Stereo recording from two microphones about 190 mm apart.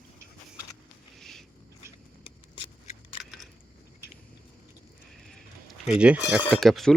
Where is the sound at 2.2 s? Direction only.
30° left (ahead or behind).